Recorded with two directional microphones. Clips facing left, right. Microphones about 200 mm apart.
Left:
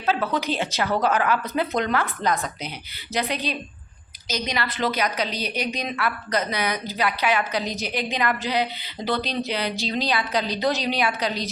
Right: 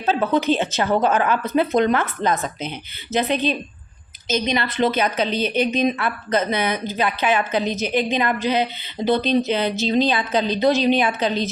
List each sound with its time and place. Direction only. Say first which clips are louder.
0.0 s a woman's voice: right 5 dB; 25° right (ahead or behind)